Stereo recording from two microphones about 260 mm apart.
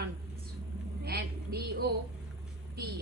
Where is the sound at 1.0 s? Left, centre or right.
Right.